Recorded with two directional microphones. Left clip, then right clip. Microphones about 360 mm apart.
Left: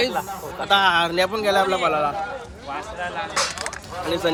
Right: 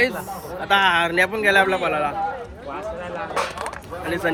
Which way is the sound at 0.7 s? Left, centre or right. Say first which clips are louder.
Even; centre.